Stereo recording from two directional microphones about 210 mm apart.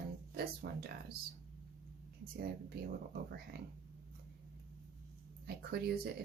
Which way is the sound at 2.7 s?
50° right (ahead or behind).